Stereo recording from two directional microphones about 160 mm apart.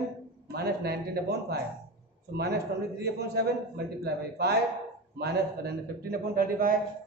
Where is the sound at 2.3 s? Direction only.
90° right.